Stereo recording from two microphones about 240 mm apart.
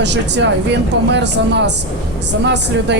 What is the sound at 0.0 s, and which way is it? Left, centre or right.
Speech, right.